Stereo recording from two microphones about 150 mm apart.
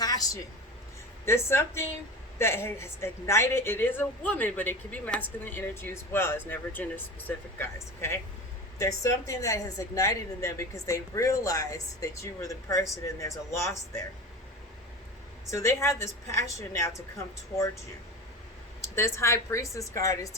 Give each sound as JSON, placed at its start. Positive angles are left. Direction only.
{"t": 0.0, "sound": "a sound", "side_deg": 25}
{"t": 1.2, "sound": "a woman's voice", "side_deg": 15}
{"t": 15.4, "sound": "a woman's voice", "side_deg": 20}
{"t": 18.8, "sound": "a woman's voice", "side_deg": 20}